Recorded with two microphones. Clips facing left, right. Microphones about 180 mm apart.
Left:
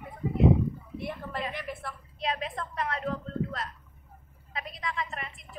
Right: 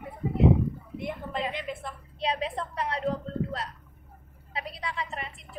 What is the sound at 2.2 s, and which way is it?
A woman's voice, 30° right (ahead or behind).